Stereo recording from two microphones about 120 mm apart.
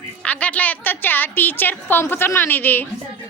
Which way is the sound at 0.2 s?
10° left (ahead or behind).